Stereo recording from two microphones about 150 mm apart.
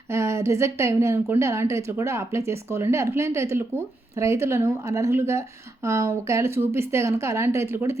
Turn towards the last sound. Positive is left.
turn(degrees=-20)  # may be behind; listen again after turning